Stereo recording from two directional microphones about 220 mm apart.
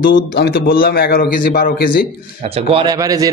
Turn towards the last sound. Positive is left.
turn(degrees=-15)  # may be behind; listen again after turning